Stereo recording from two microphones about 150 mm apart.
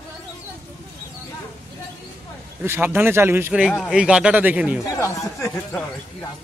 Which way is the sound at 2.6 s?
15° right (ahead or behind).